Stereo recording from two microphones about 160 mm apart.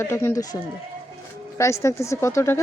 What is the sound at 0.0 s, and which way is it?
A woman's voice, 15° left (ahead or behind).